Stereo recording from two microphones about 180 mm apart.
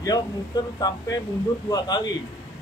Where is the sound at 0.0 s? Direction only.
20° left (ahead or behind).